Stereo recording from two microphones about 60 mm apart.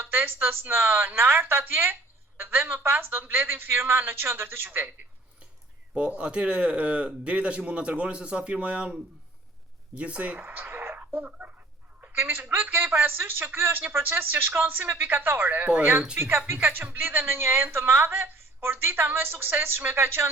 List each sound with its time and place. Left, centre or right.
0.0 s a woman's voice: right
5.9 s speech: centre
10.0 s speech: right
10.4 s speech: right
12.1 s a woman's voice: right
16.1 s a woman's voice: right